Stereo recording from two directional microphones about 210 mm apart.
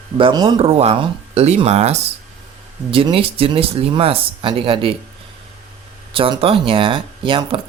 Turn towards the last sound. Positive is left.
turn(degrees=-25)  # may be behind; listen again after turning